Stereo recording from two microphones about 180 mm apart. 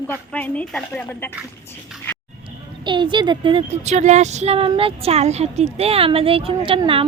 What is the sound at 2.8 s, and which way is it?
Speech, 25° right (ahead or behind).